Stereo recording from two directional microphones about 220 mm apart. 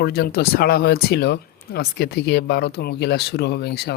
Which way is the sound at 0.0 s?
45° left (ahead or behind).